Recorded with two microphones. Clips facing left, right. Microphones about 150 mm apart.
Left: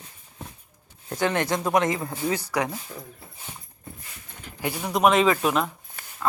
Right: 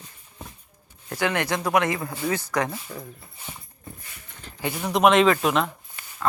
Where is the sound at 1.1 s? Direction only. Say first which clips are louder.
Left 1 dB; 20° left (ahead or behind).